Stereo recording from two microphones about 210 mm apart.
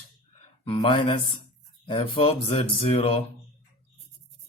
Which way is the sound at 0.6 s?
25° left (ahead or behind).